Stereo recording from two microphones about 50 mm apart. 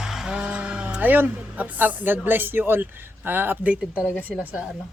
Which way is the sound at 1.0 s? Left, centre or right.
Right.